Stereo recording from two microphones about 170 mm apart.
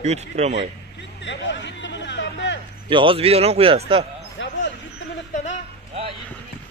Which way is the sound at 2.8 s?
30° right (ahead or behind).